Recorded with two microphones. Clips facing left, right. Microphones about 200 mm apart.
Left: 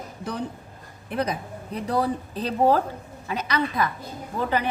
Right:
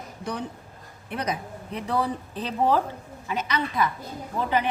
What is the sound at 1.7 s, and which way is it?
A woman's voice, 40° left (ahead or behind).